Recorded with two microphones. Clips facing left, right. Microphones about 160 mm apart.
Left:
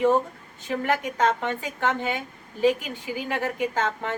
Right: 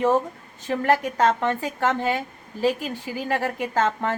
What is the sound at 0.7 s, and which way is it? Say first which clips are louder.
A woman's voice: right 4 dB; 45° right (ahead or behind).